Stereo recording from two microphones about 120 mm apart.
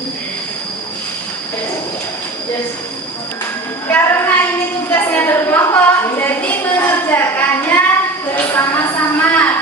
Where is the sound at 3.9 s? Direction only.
15° left (ahead or behind).